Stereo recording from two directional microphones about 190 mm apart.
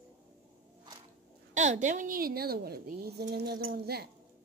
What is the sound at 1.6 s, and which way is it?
A woman's voice, 40° right (ahead or behind).